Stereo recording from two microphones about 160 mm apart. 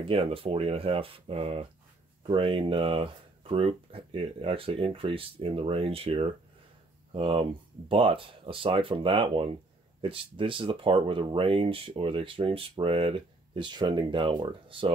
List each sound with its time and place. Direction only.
0.0 s speech: 35° right (ahead or behind)